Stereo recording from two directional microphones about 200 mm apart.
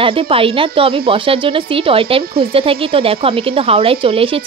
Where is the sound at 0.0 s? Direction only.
25° right (ahead or behind).